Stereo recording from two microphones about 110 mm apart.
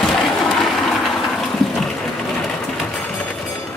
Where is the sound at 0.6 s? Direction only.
Centre (ahead or behind).